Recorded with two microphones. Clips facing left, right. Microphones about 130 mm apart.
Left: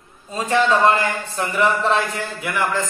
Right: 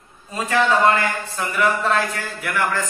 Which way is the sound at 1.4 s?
25° left (ahead or behind).